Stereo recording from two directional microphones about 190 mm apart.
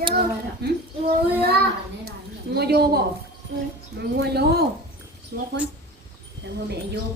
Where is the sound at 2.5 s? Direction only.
55° right (ahead or behind).